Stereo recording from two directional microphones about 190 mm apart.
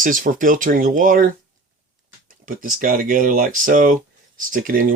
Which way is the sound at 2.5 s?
45° right (ahead or behind).